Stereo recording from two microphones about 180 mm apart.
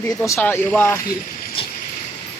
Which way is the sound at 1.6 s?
30° left (ahead or behind).